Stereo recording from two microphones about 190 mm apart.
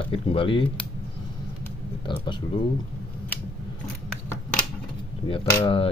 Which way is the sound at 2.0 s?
25° left (ahead or behind).